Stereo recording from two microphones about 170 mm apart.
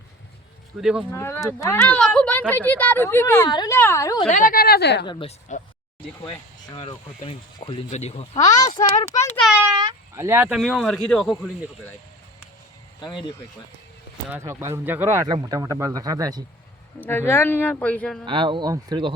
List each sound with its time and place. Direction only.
0.8 s speech: 5° right (ahead or behind)
1.1 s speech: 15° left (ahead or behind)
4.3 s speech: 50° left (ahead or behind); by 5.0 s 75° left (ahead or behind)
5.5 s speech: 45° left (ahead or behind)
6.2 s speech: 30° left (ahead or behind)
9.1 s speech: 15° left (ahead or behind)
9.4 s a sound: 5° right (ahead or behind)
9.7 s speech: 20° right (ahead or behind); by 11.7 s centre (ahead or behind)
13.0 s speech: 25° left (ahead or behind)
14.3 s speech: 15° right (ahead or behind)
17.1 s speech: 15° left (ahead or behind)
18.3 s speech: 30° right (ahead or behind)